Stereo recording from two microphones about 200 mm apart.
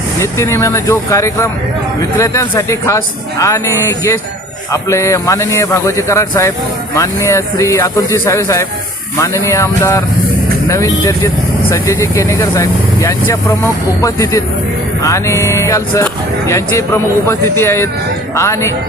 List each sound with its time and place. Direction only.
0.2 s speech: 15° left (ahead or behind)